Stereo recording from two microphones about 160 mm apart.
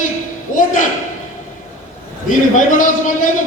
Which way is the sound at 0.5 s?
55° left (ahead or behind).